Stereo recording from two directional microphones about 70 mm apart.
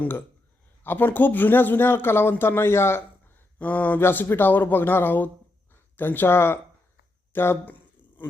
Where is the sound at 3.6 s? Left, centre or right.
Left.